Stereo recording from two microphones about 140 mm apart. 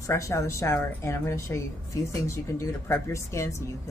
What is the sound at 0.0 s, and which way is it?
A woman's voice, 20° left (ahead or behind).